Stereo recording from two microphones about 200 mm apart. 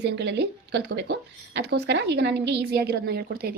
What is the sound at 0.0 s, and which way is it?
Speech, 60° right (ahead or behind).